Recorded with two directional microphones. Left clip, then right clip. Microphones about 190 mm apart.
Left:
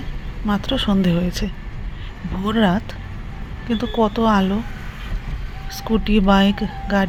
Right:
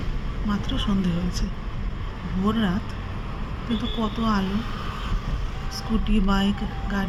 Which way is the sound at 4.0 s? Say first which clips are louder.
Left 10 dB; 25° left (ahead or behind).